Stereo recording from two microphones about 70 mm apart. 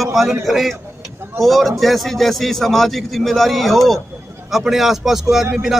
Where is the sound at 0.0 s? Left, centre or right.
Centre.